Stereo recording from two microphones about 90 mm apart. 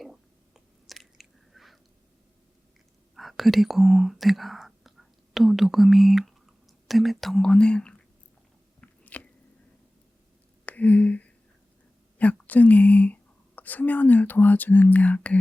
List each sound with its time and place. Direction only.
0.0 s chewing: centre (ahead or behind)
3.2 s speech: centre (ahead or behind)
8.8 s biting: 15° left (ahead or behind)
10.7 s speech: 15° left (ahead or behind)